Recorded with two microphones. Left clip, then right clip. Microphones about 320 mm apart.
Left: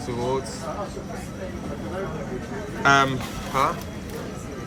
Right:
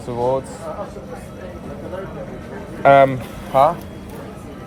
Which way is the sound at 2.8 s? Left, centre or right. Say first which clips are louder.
Right 7 dB; centre.